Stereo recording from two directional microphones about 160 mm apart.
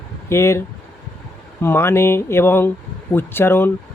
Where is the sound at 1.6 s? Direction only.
15° left (ahead or behind).